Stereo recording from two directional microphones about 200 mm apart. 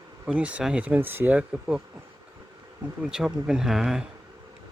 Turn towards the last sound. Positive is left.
turn(degrees=-5)  # may be behind; listen again after turning